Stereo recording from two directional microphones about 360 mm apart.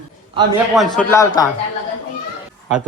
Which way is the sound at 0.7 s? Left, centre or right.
Centre.